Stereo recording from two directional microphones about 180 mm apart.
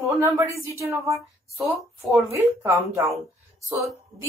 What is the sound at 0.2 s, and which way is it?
A woman's voice, 15° right (ahead or behind).